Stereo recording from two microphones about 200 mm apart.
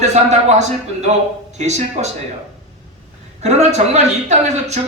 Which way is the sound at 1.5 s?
35° right (ahead or behind).